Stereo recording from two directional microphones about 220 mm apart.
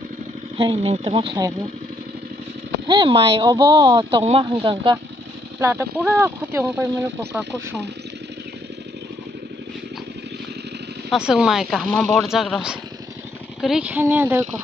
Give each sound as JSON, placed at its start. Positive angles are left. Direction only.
{"t": 0.6, "sound": "speech", "side_deg": -25}
{"t": 2.9, "sound": "speech", "side_deg": -20}
{"t": 5.6, "sound": "speech", "side_deg": -10}
{"t": 11.1, "sound": "speech", "side_deg": -5}